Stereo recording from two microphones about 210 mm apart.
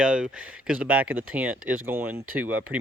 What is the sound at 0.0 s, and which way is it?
Speech, 5° right (ahead or behind).